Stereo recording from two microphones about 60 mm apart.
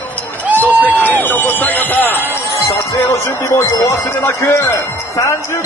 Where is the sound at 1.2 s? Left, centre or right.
Left.